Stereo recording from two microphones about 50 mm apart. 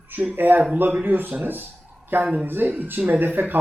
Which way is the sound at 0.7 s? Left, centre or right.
Right.